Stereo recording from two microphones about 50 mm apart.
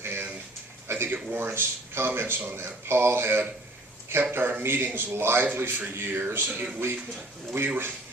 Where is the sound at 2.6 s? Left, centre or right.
Right.